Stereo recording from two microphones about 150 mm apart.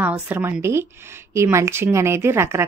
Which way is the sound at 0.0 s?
10° right (ahead or behind).